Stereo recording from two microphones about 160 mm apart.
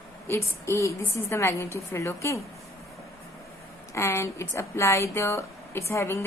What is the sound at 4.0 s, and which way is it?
Speech, 15° left (ahead or behind).